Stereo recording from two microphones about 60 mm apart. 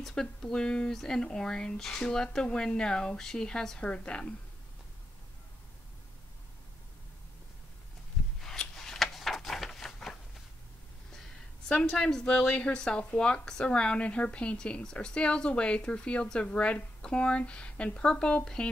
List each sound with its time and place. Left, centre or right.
0.0 s a woman's voice: centre
8.4 s a sound: centre
11.7 s a woman's voice: centre